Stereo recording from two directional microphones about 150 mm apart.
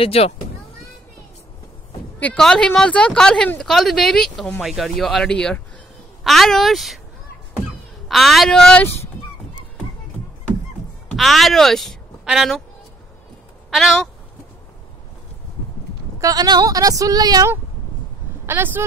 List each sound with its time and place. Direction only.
0.0 s speech: 40° left (ahead or behind)
2.1 s speech: 5° left (ahead or behind)
8.1 s speech: centre (ahead or behind)
11.1 s a woman's voice: centre (ahead or behind)
13.7 s cat: 5° right (ahead or behind)
16.2 s speech: 25° right (ahead or behind)
18.4 s speech: 15° right (ahead or behind)